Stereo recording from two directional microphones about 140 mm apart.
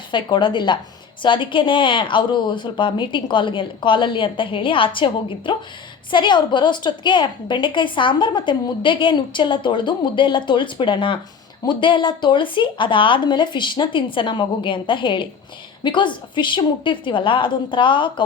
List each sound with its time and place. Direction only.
0.1 s a woman's voice: 35° left (ahead or behind)